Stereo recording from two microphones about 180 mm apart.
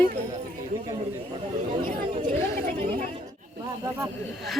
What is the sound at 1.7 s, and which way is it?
Chatter, 40° right (ahead or behind).